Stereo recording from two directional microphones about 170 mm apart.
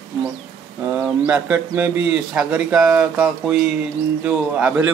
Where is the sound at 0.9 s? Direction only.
5° right (ahead or behind).